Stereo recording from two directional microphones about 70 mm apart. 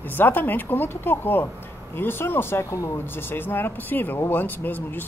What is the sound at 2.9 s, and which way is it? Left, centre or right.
Speech, left.